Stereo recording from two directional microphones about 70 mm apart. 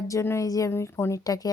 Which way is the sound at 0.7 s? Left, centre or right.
Left.